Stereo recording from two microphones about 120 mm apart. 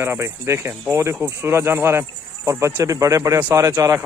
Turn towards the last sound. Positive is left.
turn(degrees=-25)  # may be behind; listen again after turning